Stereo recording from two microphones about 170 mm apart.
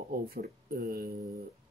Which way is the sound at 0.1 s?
60° right (ahead or behind).